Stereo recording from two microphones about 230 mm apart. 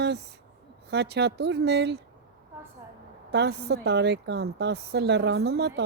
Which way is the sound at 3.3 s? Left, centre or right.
Right.